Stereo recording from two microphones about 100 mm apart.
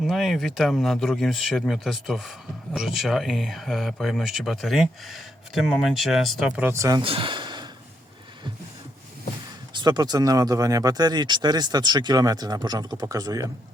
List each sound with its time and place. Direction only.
0.0 s speech: centre (ahead or behind)
6.7 s speech: 35° right (ahead or behind)
7.0 s a sound: 60° right (ahead or behind)
9.7 s speech: 45° right (ahead or behind)